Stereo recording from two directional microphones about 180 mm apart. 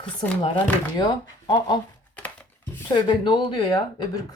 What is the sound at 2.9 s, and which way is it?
Speech, 25° left (ahead or behind).